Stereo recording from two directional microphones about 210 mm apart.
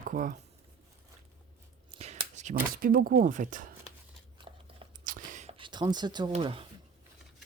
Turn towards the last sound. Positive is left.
turn(degrees=-25)  # may be behind; listen again after turning